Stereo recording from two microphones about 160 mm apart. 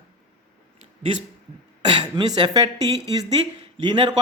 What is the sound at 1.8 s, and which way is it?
Speech, 30° right (ahead or behind).